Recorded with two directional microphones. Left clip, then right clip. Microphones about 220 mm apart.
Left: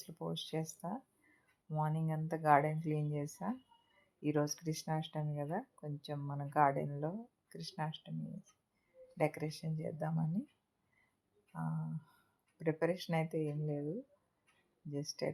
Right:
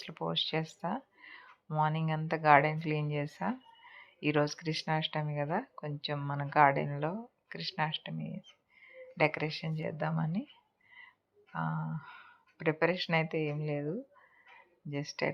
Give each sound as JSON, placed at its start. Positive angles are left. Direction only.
{"t": 0.3, "sound": "speech", "side_deg": -5}
{"t": 3.2, "sound": "speech", "side_deg": -20}
{"t": 4.2, "sound": "speech", "side_deg": -5}
{"t": 7.5, "sound": "speech", "side_deg": -5}
{"t": 9.4, "sound": "speech", "side_deg": -5}
{"t": 11.5, "sound": "speech", "side_deg": -10}
{"t": 14.8, "sound": "speech", "side_deg": -5}